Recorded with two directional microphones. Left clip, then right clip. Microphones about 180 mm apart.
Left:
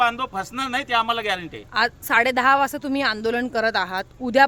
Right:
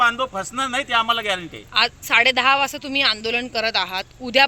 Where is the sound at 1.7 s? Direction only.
45° left (ahead or behind).